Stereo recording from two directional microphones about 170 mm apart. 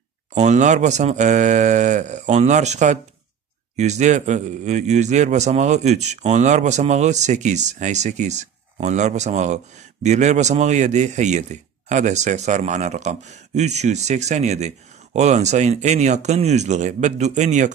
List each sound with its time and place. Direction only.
0.3 s a man's voice: 45° right (ahead or behind)